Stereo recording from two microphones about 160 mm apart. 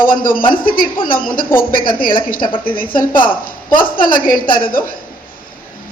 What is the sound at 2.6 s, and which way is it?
A woman's voice, 60° left (ahead or behind).